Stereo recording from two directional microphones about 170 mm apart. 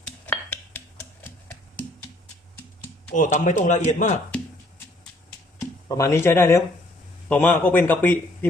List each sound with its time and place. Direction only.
0.0 s a sound: 10° left (ahead or behind)
3.2 s speech: 50° left (ahead or behind)
5.5 s speech: 15° left (ahead or behind)